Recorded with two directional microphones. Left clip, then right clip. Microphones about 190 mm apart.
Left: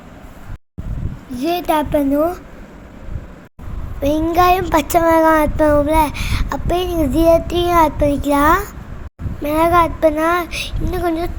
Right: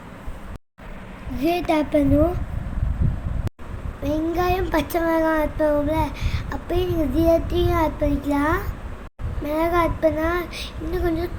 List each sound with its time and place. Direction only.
1.4 s a child's voice: 50° left (ahead or behind)
4.0 s a child's voice: 40° left (ahead or behind)